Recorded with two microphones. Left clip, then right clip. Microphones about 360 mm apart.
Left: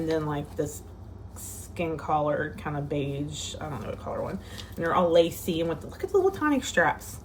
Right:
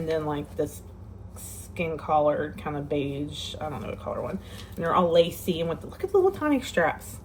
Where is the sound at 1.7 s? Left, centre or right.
Centre.